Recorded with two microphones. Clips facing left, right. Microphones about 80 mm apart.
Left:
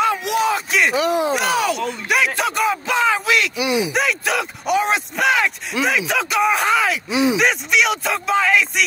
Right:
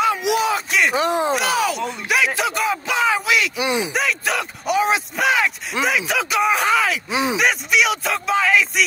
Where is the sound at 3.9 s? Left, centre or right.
Centre.